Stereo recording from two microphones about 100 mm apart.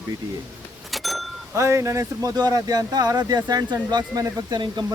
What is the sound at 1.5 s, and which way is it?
Speech, 30° right (ahead or behind).